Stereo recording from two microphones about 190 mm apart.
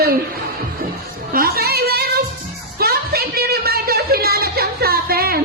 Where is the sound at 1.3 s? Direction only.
55° right (ahead or behind).